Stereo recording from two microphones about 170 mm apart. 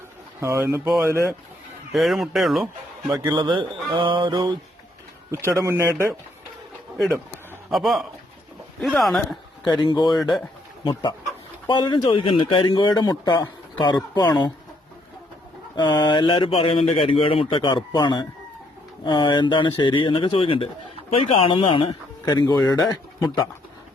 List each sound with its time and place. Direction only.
0.3 s speech: 15° right (ahead or behind)
1.9 s speech: centre (ahead or behind)
3.2 s speech: 25° right (ahead or behind)
7.7 s speech: centre (ahead or behind)
9.6 s speech: 25° left (ahead or behind)
11.7 s speech: 30° left (ahead or behind)
15.7 s speech: 25° left (ahead or behind)